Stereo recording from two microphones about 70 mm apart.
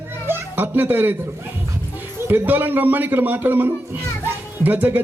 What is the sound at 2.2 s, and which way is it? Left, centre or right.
A man's voice, right.